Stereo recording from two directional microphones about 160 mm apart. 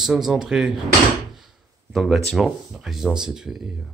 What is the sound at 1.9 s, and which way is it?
Speech, centre (ahead or behind).